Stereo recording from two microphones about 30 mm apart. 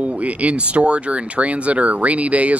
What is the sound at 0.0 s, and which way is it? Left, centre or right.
Speech, right.